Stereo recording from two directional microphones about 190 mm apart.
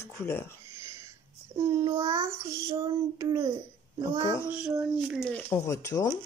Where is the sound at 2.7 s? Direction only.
30° right (ahead or behind).